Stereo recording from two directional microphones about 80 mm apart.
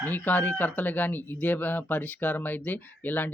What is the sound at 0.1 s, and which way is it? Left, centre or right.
Speech, left.